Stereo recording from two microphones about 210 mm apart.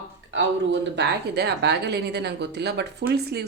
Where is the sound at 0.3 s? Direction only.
55° right (ahead or behind).